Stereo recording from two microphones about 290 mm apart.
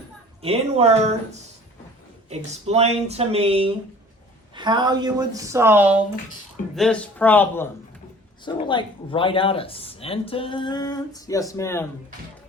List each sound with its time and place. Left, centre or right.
0.4 s a woman's voice: right; by 11.9 s centre